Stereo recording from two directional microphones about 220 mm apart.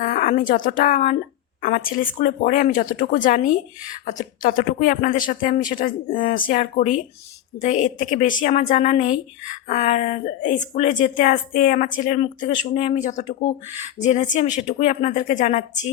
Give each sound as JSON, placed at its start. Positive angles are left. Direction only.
{"t": 0.0, "sound": "a woman's voice", "side_deg": 35}